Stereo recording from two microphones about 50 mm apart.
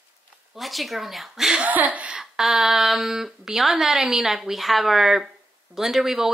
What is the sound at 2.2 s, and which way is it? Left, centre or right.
A woman's voice, centre.